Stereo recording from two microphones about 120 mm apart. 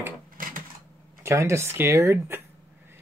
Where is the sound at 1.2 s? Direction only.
25° right (ahead or behind).